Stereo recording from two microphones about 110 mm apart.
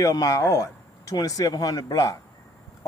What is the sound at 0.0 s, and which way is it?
Speech, 30° left (ahead or behind).